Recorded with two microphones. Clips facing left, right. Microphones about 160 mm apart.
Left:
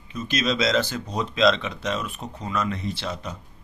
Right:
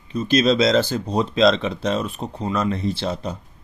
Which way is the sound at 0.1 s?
30° right (ahead or behind).